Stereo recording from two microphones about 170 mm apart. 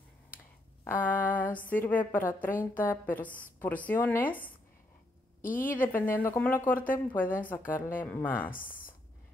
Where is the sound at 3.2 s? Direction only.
55° left (ahead or behind).